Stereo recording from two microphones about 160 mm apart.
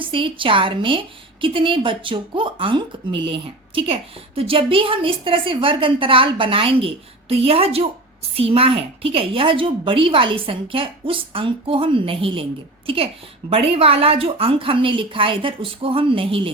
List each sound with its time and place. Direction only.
0.0 s a woman's voice: 35° right (ahead or behind)